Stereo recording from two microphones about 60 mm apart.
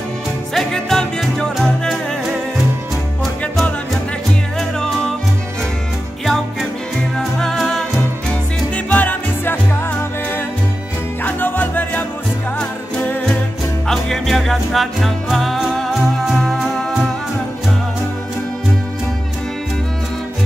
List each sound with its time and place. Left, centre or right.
0.6 s music: centre
4.6 s music: centre
6.2 s music: centre
8.3 s music: left
13.8 s music: centre